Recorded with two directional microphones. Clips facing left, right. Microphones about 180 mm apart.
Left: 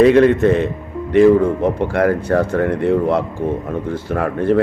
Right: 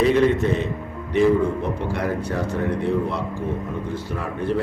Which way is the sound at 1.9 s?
65° left (ahead or behind).